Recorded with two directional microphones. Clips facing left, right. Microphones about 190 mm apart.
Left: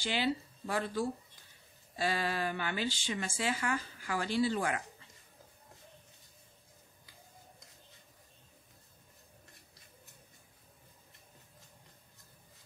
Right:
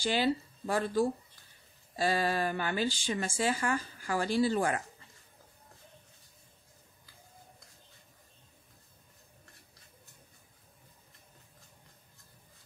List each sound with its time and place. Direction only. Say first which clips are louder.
0.0 s speech: right 4 dB; 40° right (ahead or behind)